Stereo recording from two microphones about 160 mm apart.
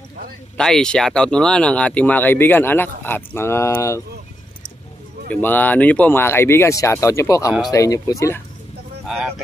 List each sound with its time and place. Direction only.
0.6 s speech: 5° left (ahead or behind)
5.3 s speech: 10° left (ahead or behind)
9.0 s a sound: centre (ahead or behind)